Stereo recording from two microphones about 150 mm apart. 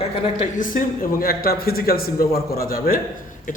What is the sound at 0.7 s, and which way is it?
A man's voice, 70° left (ahead or behind).